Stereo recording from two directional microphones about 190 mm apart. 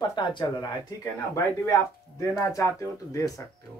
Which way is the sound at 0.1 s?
25° left (ahead or behind).